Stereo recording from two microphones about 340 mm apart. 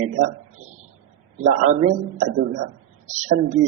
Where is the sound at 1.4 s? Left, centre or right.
Right.